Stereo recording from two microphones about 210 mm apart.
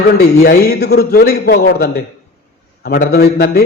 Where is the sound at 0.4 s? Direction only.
50° left (ahead or behind).